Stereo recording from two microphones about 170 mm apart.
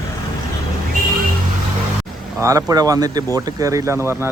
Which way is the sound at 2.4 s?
20° right (ahead or behind).